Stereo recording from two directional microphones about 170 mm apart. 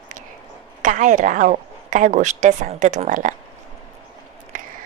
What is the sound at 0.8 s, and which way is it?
A woman's voice, 50° right (ahead or behind).